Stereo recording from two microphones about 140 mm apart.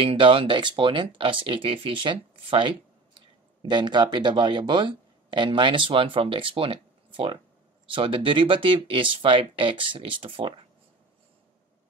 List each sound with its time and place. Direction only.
0.0 s speech: 40° right (ahead or behind)